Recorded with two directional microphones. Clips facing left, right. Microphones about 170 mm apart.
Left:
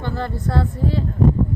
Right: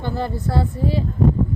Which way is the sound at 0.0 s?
10° right (ahead or behind).